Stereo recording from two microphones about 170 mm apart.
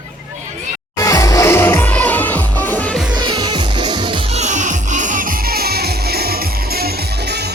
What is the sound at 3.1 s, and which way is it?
Music, 25° right (ahead or behind).